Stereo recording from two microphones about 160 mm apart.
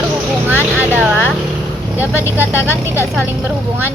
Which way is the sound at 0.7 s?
10° right (ahead or behind).